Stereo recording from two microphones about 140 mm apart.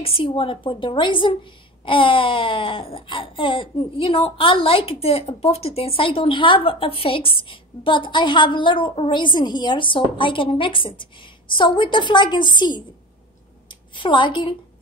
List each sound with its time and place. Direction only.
0.0 s a woman's voice: 40° left (ahead or behind)